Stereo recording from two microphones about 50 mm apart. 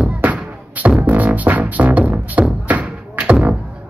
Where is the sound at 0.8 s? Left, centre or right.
Right.